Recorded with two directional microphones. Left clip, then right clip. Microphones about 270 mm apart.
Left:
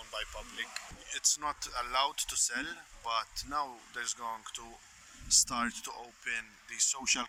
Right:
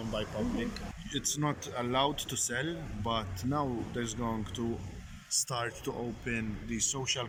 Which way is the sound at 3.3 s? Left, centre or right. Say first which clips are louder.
Right 2 dB; left.